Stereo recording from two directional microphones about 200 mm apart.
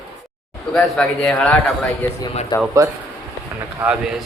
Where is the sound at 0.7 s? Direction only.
5° left (ahead or behind).